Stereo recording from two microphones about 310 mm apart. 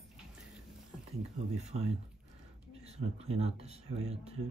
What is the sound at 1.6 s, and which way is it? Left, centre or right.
Speech, right.